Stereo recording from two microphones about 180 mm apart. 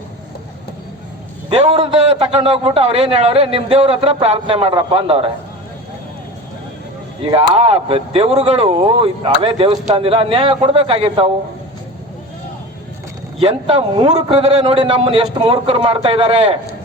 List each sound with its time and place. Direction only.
1.5 s a man's voice: 35° right (ahead or behind)
7.2 s a man's voice: 30° right (ahead or behind)
13.4 s a man's voice: 35° right (ahead or behind)